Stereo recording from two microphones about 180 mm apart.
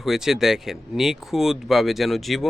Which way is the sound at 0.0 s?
Centre (ahead or behind).